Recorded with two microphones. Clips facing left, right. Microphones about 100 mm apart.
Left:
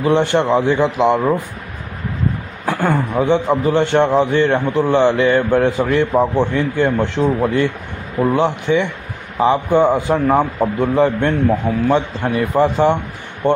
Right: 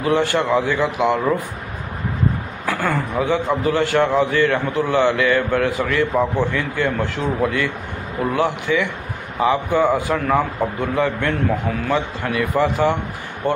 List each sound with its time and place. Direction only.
0.0 s a man's voice: 25° left (ahead or behind)
2.6 s a man's voice: 20° left (ahead or behind)